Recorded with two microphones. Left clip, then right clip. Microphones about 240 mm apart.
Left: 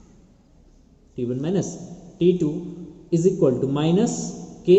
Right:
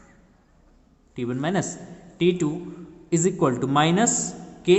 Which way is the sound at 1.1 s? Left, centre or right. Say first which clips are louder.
Left 1 dB; right.